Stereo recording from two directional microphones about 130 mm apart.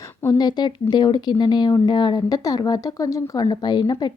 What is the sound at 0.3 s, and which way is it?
A woman's voice, 35° left (ahead or behind).